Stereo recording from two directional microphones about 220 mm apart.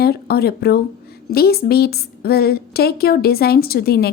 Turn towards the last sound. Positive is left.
turn(degrees=45)  # may be behind; listen again after turning